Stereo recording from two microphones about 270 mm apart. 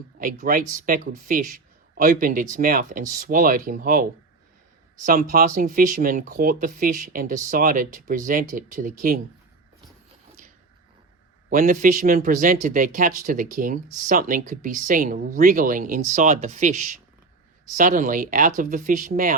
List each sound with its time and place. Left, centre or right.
0.2 s a man's voice: right
11.4 s speech: right